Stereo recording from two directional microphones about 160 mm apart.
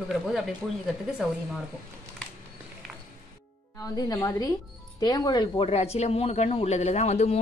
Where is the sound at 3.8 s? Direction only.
20° left (ahead or behind).